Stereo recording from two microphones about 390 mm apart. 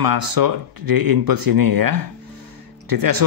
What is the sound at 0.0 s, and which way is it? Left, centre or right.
Speech, right.